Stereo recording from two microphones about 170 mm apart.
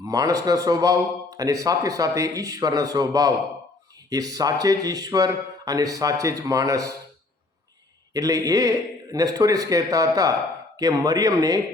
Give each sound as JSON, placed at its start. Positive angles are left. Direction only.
{"t": 0.0, "sound": "a man's voice", "side_deg": -20}
{"t": 8.1, "sound": "a man's voice", "side_deg": -20}